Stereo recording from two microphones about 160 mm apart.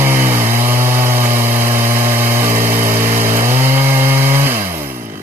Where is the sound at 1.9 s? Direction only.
15° right (ahead or behind).